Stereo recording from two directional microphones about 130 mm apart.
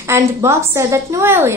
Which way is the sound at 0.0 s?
20° right (ahead or behind).